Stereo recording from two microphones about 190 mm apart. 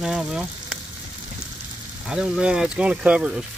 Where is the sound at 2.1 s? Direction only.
5° right (ahead or behind).